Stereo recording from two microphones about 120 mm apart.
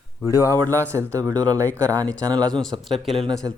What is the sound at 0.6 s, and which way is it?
Speech, 25° right (ahead or behind).